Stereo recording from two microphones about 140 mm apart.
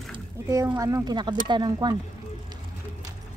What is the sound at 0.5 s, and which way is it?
Speech, 20° right (ahead or behind).